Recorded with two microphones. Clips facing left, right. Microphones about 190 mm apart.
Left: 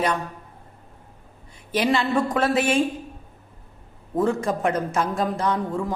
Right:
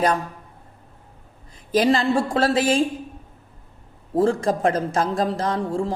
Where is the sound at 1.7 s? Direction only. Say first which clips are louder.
Right 3 dB; 40° right (ahead or behind).